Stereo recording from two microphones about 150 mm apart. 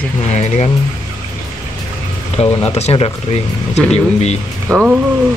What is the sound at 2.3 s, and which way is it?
Speech, 45° left (ahead or behind).